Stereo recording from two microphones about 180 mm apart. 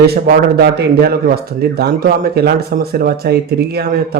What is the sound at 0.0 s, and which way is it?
Speech, 60° right (ahead or behind).